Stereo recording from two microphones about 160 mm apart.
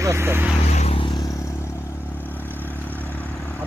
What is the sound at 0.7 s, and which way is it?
Vehicle, 40° left (ahead or behind).